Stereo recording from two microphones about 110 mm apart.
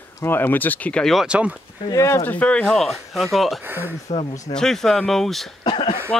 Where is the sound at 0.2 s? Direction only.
20° left (ahead or behind).